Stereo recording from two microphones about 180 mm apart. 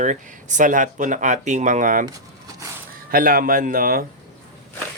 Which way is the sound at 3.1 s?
50° right (ahead or behind).